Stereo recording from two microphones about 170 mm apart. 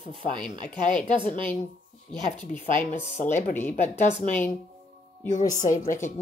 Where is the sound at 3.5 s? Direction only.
10° left (ahead or behind).